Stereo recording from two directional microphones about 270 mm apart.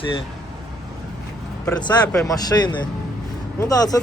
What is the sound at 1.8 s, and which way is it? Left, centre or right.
Speech, centre.